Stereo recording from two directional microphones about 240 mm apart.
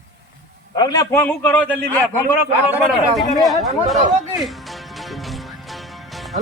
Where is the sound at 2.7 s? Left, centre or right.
Centre.